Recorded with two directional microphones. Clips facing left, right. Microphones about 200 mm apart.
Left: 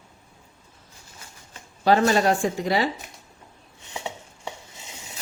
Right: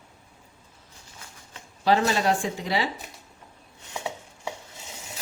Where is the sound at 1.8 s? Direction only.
50° left (ahead or behind).